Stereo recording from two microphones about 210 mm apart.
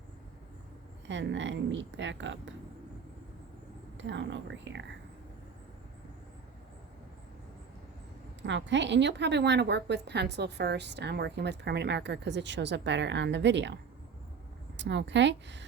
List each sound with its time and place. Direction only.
1.0 s a woman's voice: 60° right (ahead or behind)
3.9 s a woman's voice: 60° right (ahead or behind)
8.4 s a woman's voice: 60° right (ahead or behind)
14.8 s a woman's voice: 55° right (ahead or behind)